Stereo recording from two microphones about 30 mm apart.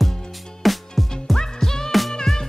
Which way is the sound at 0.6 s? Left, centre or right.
Centre.